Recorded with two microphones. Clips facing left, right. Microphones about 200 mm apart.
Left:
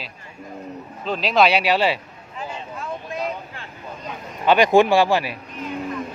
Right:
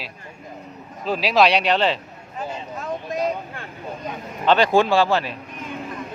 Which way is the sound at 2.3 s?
40° right (ahead or behind).